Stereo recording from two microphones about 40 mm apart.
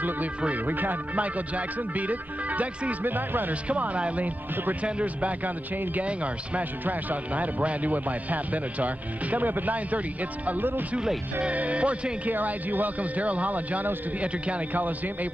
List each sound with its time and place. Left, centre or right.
0.7 s speech: right
2.9 s speech: right
3.6 s speech: right
6.8 s speech: right
12.3 s speech: right
14.7 s speech: right